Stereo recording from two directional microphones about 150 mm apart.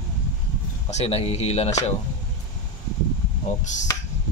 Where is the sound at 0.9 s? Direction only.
45° left (ahead or behind).